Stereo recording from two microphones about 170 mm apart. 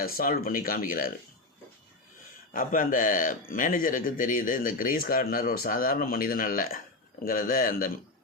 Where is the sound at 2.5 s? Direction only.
55° left (ahead or behind).